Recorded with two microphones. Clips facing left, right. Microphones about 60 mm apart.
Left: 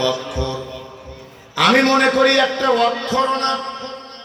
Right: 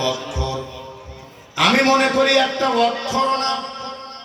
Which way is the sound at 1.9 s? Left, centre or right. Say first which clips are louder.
Left 1 dB; left.